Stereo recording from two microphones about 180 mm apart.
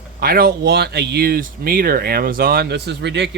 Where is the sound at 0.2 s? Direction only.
55° right (ahead or behind).